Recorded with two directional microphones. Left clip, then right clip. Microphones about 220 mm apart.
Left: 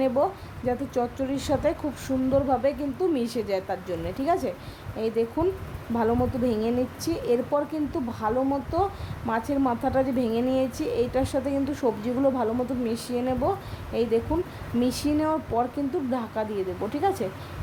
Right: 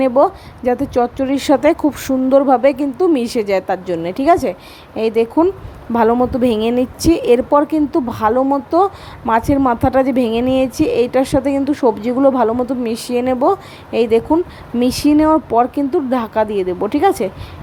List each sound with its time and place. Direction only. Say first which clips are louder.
0.0 s a woman's voice: right 11 dB; 30° right (ahead or behind)